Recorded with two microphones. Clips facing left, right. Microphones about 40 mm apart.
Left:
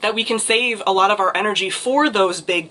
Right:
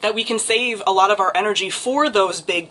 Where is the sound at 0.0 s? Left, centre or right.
Centre.